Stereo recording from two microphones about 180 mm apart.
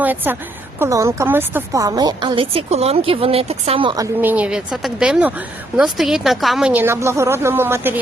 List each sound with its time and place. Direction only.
0.0 s a woman's voice: 10° right (ahead or behind)